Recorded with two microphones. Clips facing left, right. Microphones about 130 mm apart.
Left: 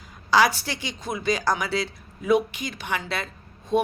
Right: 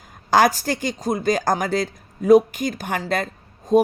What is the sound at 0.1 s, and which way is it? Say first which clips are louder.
A woman's voice: right 3 dB; 50° right (ahead or behind).